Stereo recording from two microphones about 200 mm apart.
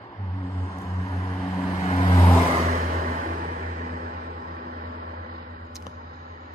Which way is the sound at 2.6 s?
40° right (ahead or behind).